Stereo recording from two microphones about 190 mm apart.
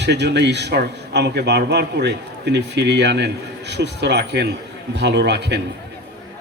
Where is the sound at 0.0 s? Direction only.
65° right (ahead or behind).